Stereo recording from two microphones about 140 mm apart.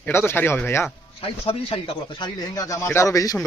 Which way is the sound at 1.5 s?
40° left (ahead or behind).